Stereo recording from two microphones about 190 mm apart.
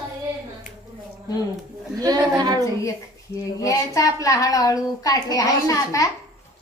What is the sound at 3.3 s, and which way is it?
Speech, 15° left (ahead or behind).